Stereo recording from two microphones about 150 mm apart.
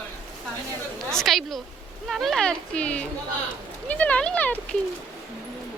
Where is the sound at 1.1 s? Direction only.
Centre (ahead or behind).